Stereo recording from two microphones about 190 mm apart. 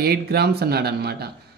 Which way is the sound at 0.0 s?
55° right (ahead or behind).